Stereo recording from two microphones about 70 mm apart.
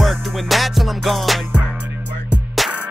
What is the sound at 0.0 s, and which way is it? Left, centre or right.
Music, centre.